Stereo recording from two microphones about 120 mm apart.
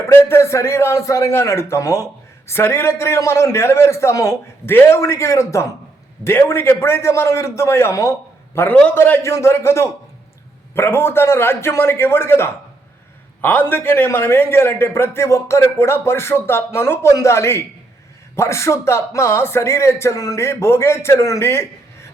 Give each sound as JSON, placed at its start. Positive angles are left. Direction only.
{"t": 0.0, "sound": "a man's voice", "side_deg": 20}
{"t": 8.5, "sound": "a man's voice", "side_deg": 15}